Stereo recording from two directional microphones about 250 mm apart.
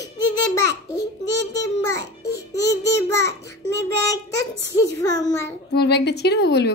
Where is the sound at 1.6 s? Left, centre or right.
Centre.